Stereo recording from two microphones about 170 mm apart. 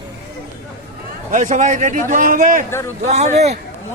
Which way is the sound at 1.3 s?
50° right (ahead or behind).